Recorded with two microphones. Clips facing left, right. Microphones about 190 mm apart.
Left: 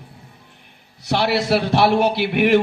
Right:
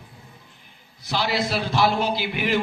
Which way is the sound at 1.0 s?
65° left (ahead or behind).